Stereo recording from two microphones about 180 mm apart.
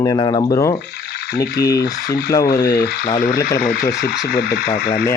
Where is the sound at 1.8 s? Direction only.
60° left (ahead or behind).